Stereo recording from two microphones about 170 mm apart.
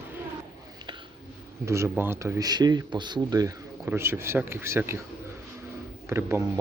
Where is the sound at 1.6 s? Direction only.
15° right (ahead or behind).